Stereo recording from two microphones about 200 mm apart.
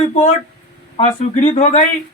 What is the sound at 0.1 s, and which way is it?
Speech, 30° left (ahead or behind).